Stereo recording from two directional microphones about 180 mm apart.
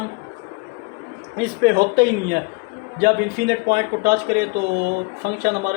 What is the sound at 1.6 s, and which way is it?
Speech, 65° right (ahead or behind).